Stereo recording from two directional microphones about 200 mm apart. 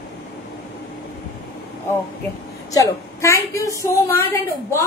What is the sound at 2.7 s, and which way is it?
A woman's voice, 15° left (ahead or behind).